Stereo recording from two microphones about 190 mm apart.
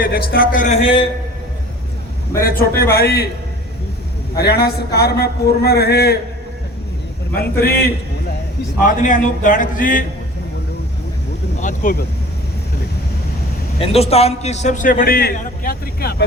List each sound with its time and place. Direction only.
0.0 s a man's voice: 50° left (ahead or behind); by 1.0 s 30° left (ahead or behind)
2.4 s a man's voice: 50° left (ahead or behind)
2.7 s a man's voice: 15° left (ahead or behind)
3.0 s speech: 55° left (ahead or behind)
4.4 s speech: 55° left (ahead or behind)
7.3 s speech: 55° left (ahead or behind)
8.9 s a man's voice: 45° left (ahead or behind)
11.6 s speech: 45° left (ahead or behind)
13.7 s a man's voice: 30° left (ahead or behind); by 16.2 s 55° left (ahead or behind)